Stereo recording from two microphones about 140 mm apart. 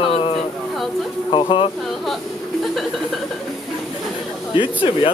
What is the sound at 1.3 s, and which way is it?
Mantra, 40° left (ahead or behind).